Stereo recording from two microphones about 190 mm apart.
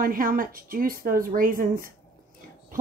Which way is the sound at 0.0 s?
50° right (ahead or behind).